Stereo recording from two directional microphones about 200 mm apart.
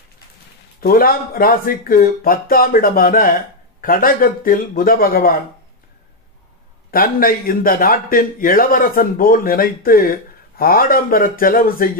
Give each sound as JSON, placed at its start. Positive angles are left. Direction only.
{"t": 0.7, "sound": "a man's voice", "side_deg": 45}
{"t": 6.9, "sound": "a man's voice", "side_deg": 45}